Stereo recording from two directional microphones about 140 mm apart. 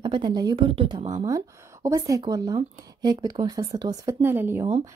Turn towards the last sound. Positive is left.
turn(degrees=-15)  # may be behind; listen again after turning